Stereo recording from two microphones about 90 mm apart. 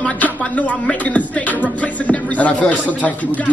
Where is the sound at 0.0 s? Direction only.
15° left (ahead or behind).